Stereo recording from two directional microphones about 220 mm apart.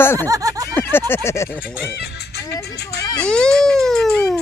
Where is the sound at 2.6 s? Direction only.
45° left (ahead or behind).